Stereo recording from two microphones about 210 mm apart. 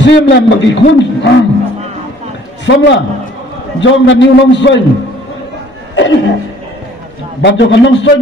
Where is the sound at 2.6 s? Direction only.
60° left (ahead or behind).